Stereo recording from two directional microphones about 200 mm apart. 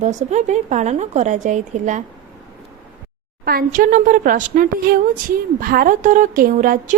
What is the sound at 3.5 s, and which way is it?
A woman's voice, 45° right (ahead or behind).